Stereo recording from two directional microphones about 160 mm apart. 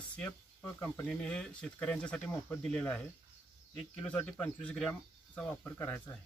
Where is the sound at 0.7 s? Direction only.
10° left (ahead or behind).